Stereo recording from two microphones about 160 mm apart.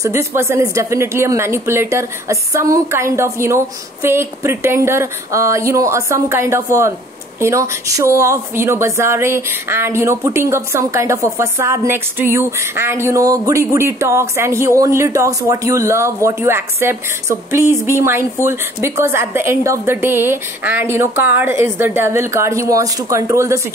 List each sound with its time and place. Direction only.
0.0 s a woman's voice: 20° right (ahead or behind)